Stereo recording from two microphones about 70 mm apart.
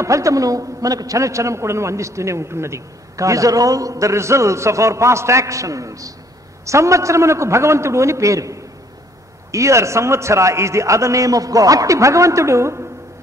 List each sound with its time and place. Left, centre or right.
0.0 s a man's voice: right